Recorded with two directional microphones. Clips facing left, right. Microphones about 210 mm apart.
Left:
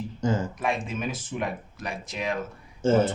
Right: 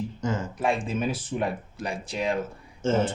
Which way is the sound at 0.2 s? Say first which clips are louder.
Left 4 dB; 30° left (ahead or behind).